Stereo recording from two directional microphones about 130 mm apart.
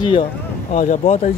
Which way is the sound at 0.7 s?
70° left (ahead or behind).